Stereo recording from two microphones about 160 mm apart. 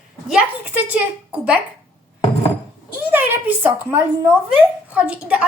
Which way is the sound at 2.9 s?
10° right (ahead or behind).